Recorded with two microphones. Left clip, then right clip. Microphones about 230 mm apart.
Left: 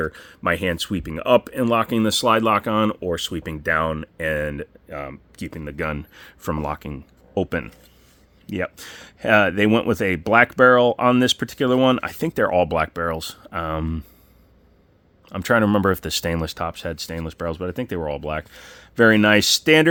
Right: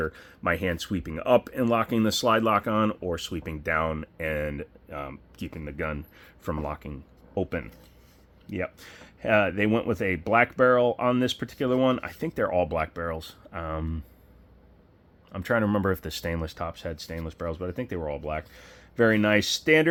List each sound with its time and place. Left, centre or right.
0.0 s speech: left
15.3 s speech: left